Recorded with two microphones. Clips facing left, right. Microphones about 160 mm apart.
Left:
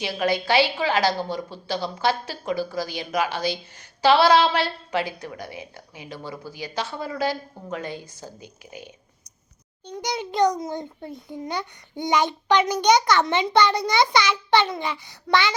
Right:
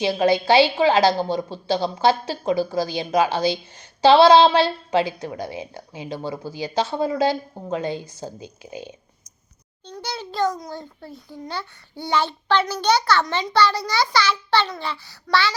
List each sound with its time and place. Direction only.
0.0 s a woman's voice: 25° right (ahead or behind)
9.8 s a child's voice: 15° left (ahead or behind)